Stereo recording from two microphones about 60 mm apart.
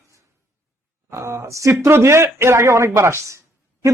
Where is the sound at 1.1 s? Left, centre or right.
Right.